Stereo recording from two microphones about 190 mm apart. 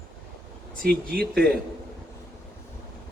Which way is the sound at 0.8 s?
50° right (ahead or behind).